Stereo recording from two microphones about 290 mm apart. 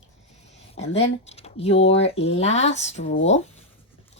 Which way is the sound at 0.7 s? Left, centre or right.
Left.